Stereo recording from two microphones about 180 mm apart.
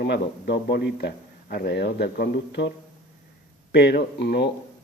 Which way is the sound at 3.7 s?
70° left (ahead or behind).